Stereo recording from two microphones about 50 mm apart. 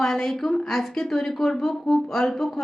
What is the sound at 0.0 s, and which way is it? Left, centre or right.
A woman's voice, centre.